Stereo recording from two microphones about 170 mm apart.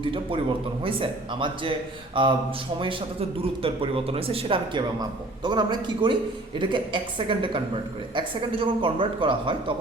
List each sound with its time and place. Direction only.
0.0 s a man's voice: 30° right (ahead or behind)